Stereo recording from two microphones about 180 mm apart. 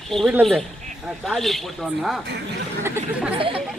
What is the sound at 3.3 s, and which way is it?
Speech, 30° right (ahead or behind).